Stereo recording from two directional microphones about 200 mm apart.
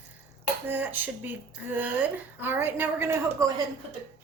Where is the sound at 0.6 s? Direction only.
10° right (ahead or behind).